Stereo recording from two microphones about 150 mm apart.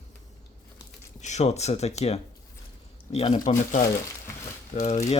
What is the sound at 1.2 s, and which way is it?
Speech, 50° left (ahead or behind).